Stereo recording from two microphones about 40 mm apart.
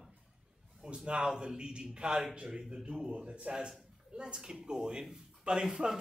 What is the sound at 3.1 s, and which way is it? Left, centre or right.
A man's voice, right.